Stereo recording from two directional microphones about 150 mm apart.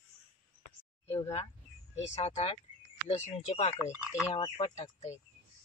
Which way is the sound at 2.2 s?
45° left (ahead or behind).